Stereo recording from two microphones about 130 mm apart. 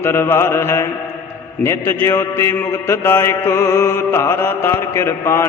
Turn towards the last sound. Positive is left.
turn(degrees=20)  # may be behind; listen again after turning